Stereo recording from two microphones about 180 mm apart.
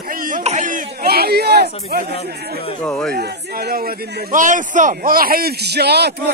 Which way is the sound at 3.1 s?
65° right (ahead or behind).